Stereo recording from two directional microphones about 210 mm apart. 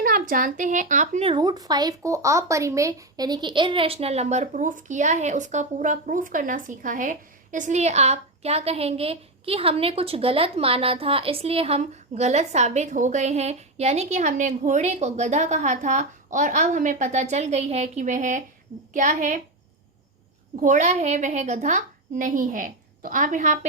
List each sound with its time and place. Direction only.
0.0 s speech: 40° right (ahead or behind)
20.6 s speech: 35° right (ahead or behind)